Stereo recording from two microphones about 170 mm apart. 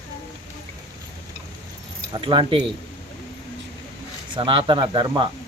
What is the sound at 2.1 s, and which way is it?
Speech, 30° right (ahead or behind).